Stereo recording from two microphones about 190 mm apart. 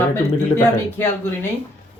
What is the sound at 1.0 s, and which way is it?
Speech, 10° left (ahead or behind).